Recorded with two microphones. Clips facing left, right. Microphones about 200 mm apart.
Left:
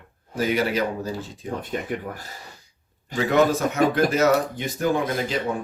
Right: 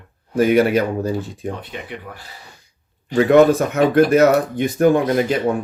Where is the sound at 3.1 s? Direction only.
55° right (ahead or behind).